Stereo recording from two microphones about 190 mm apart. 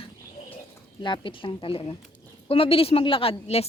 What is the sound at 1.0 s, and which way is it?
A woman's voice, 25° left (ahead or behind).